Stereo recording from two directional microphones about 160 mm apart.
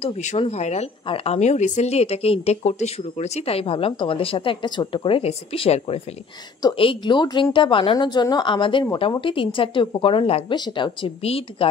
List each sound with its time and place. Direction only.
0.0 s speech: 45° left (ahead or behind)